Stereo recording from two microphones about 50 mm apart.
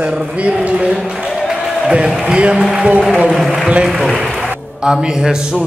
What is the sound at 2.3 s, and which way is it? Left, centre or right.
Speech, right.